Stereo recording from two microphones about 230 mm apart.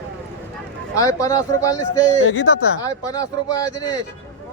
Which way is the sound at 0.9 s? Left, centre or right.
Centre.